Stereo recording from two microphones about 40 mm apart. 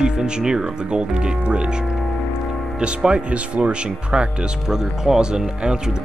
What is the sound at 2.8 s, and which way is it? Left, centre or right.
Speech, right.